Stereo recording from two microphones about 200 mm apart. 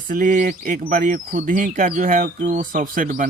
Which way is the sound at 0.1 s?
40° right (ahead or behind).